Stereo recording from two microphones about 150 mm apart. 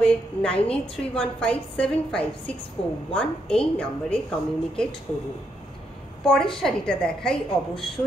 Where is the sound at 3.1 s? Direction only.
5° left (ahead or behind).